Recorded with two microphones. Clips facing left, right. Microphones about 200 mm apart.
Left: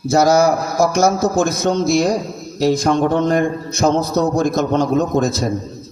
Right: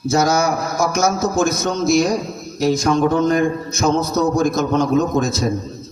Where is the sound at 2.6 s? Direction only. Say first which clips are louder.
Left 1 dB; 60° left (ahead or behind).